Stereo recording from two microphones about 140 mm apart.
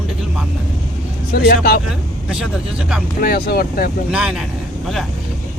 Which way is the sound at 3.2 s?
90° left.